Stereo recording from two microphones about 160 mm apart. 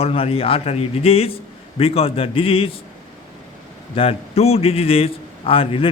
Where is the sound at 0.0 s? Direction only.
35° left (ahead or behind).